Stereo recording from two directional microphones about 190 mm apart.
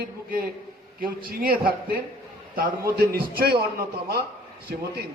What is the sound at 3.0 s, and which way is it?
Speech, 50° right (ahead or behind).